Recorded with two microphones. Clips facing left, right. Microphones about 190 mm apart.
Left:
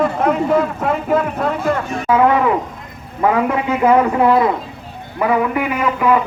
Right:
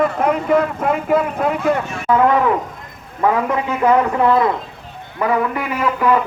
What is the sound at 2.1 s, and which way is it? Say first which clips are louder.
A man's voice: left 1 dB; 5° left (ahead or behind).